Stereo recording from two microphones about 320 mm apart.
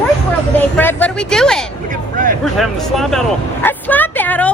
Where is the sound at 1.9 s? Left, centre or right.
Right.